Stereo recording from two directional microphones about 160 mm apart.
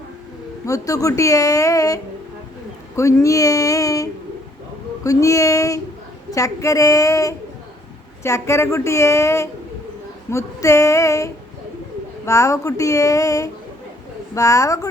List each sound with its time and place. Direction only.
0.6 s speech: 20° left (ahead or behind)